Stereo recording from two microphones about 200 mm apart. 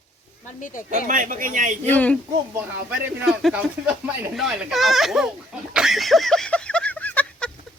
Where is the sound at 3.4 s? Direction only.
5° right (ahead or behind).